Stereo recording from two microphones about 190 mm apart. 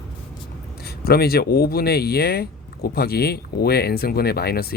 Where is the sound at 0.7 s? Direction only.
55° left (ahead or behind).